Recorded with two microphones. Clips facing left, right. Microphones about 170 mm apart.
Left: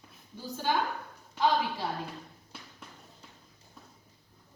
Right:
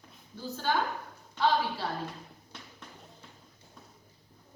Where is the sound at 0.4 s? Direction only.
15° left (ahead or behind).